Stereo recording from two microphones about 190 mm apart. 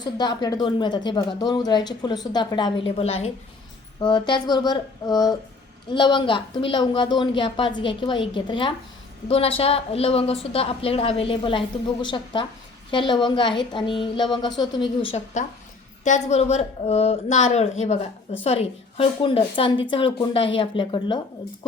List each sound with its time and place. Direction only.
0.0 s a woman's voice: 20° left (ahead or behind)
16.0 s a woman's voice: 35° left (ahead or behind)